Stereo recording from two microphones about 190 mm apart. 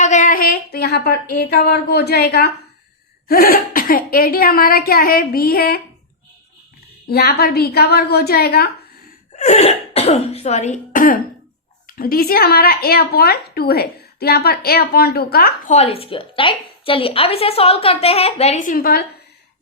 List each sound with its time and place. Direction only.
0.0 s a woman's voice: 40° left (ahead or behind)
7.1 s a woman's voice: 55° left (ahead or behind)
9.4 s a woman's voice: 35° left (ahead or behind); by 15.7 s 55° left (ahead or behind)
15.7 s a woman's voice: 30° left (ahead or behind); by 19.0 s 50° left (ahead or behind)